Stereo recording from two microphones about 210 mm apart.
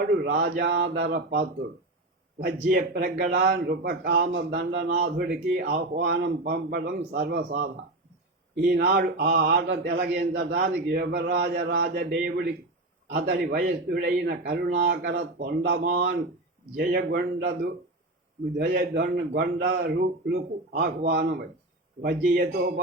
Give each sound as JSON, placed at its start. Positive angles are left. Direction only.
{"t": 0.2, "sound": "mantra", "side_deg": -55}
{"t": 0.6, "sound": "speech", "side_deg": -55}
{"t": 18.5, "sound": "speech", "side_deg": -45}